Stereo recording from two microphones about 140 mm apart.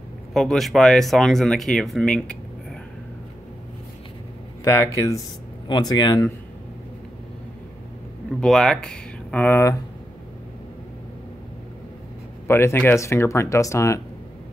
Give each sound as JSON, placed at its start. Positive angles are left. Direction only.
{"t": 0.3, "sound": "speech", "side_deg": 0}
{"t": 4.6, "sound": "speech", "side_deg": 20}
{"t": 8.4, "sound": "speech", "side_deg": 5}
{"t": 12.4, "sound": "speech", "side_deg": 15}